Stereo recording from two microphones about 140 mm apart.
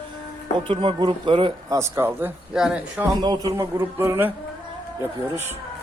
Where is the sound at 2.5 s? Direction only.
5° right (ahead or behind).